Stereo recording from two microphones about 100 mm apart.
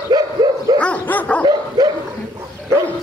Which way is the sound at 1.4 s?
40° right (ahead or behind).